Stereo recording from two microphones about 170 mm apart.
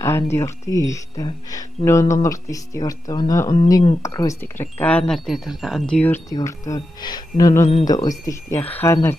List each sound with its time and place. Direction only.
0.0 s speech: 15° left (ahead or behind)
6.3 s speech: 20° left (ahead or behind)